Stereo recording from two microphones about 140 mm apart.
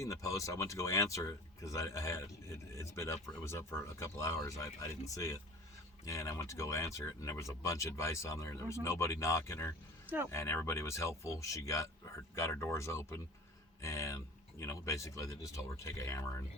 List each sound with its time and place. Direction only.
0.0 s speech: 20° left (ahead or behind)